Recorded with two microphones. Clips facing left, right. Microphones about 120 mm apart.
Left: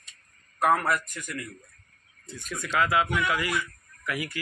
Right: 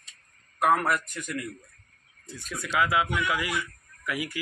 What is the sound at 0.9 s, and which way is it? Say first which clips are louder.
Speech: even; 25° right (ahead or behind).